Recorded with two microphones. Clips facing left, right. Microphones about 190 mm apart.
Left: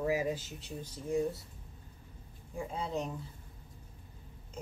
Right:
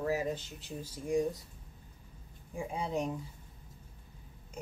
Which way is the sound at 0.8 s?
15° right (ahead or behind).